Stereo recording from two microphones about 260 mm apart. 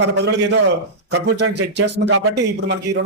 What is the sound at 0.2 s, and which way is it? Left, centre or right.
A man's voice, right.